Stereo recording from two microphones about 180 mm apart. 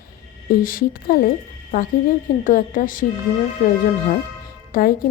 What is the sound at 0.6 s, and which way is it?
Speech, 50° left (ahead or behind).